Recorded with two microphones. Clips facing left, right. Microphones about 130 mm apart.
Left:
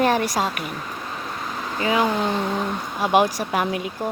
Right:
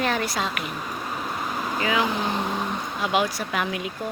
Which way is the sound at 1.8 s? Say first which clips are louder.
Left 4 dB; 35° left (ahead or behind).